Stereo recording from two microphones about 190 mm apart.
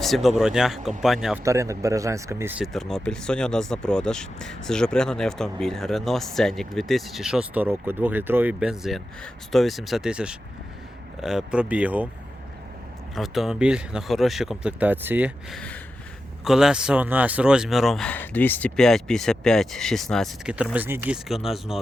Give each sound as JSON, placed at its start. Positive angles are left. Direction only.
{"t": 0.0, "sound": "speech", "side_deg": 0}
{"t": 1.5, "sound": "speech", "side_deg": -15}
{"t": 2.7, "sound": "speech", "side_deg": 5}
{"t": 13.1, "sound": "speech", "side_deg": 0}
{"t": 15.5, "sound": "gasp", "side_deg": 5}
{"t": 16.4, "sound": "speech", "side_deg": -5}